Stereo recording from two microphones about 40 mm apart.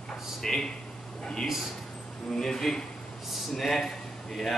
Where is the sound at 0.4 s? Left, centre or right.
Centre.